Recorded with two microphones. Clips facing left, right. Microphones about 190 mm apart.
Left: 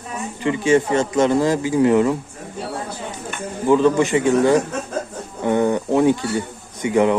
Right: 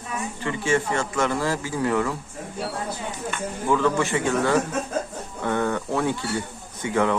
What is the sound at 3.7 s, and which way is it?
A man's voice, 20° left (ahead or behind).